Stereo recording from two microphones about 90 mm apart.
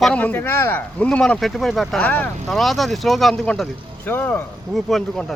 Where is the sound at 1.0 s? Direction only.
10° left (ahead or behind).